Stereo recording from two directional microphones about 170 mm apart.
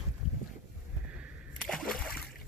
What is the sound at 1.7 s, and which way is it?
Splash, 5° left (ahead or behind).